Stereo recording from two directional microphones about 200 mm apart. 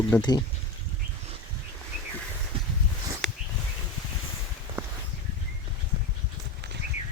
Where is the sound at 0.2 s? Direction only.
20° left (ahead or behind).